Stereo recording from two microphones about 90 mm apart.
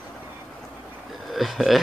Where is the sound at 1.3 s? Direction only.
Centre (ahead or behind).